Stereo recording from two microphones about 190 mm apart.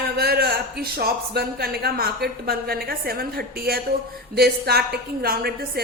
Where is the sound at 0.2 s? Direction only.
55° right (ahead or behind).